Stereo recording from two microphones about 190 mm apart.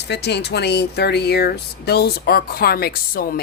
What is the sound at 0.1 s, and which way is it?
Speech, 60° left (ahead or behind).